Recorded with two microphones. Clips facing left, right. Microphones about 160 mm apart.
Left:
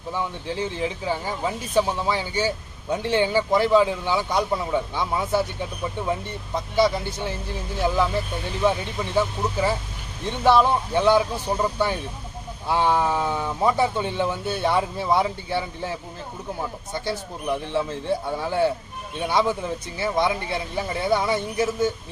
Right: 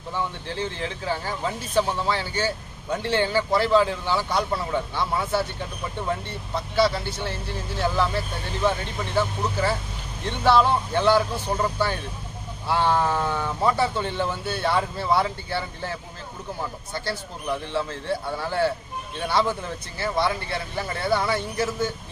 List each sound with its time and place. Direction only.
0.1 s speech: 10° left (ahead or behind)
6.7 s speech: 15° left (ahead or behind)
9.1 s speech: 15° left (ahead or behind)